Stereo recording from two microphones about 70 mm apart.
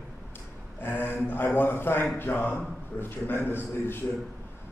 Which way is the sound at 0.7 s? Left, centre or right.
Left.